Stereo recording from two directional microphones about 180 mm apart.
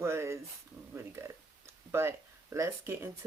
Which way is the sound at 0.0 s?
15° right (ahead or behind).